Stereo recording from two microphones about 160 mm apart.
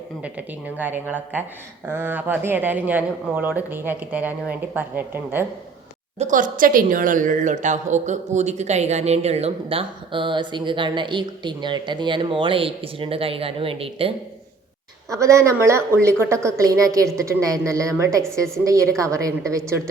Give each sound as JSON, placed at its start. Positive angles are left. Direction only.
{"t": 0.2, "sound": "speech", "side_deg": -10}
{"t": 6.1, "sound": "a woman's voice", "side_deg": -50}
{"t": 15.1, "sound": "a woman's voice", "side_deg": -20}